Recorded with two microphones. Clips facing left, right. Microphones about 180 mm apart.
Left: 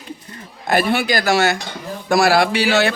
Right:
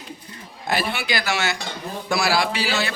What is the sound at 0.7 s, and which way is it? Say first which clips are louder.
A man's voice: left 7 dB; 50° left (ahead or behind).